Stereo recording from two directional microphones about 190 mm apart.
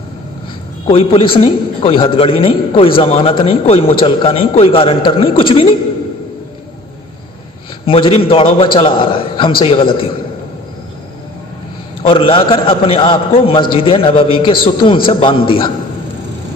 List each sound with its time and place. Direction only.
0.9 s a man's voice: 30° left (ahead or behind)
7.9 s a man's voice: 30° left (ahead or behind)
12.0 s a man's voice: 30° left (ahead or behind)